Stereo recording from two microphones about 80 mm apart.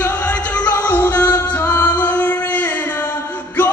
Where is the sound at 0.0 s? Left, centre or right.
Left.